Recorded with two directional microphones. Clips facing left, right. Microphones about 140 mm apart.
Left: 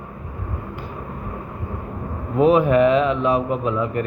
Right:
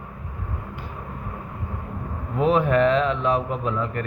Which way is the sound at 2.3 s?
10° left (ahead or behind).